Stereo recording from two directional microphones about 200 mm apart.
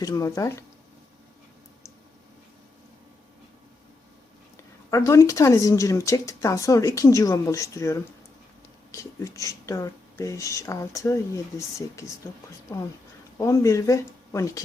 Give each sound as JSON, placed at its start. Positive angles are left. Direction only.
{"t": 0.0, "sound": "speech", "side_deg": 15}
{"t": 4.9, "sound": "speech", "side_deg": 15}
{"t": 13.4, "sound": "speech", "side_deg": 15}